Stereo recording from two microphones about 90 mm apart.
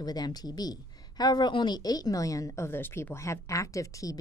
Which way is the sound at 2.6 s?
25° left (ahead or behind).